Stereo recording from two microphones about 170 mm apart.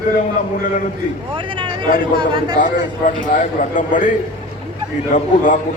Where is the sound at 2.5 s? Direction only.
50° left (ahead or behind).